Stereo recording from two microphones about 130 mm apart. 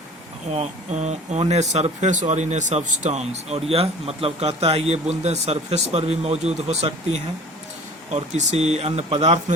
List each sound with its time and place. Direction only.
0.5 s speech: 60° right (ahead or behind)